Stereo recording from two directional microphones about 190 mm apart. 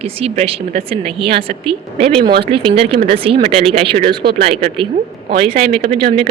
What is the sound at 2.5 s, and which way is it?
Speech, 30° right (ahead or behind).